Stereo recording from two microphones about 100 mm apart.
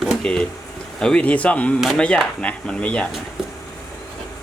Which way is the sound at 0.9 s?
10° left (ahead or behind).